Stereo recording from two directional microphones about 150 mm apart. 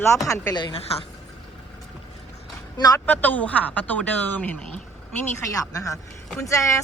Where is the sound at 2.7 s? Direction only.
25° left (ahead or behind).